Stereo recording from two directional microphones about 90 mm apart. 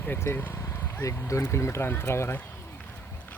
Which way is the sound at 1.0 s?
35° left (ahead or behind).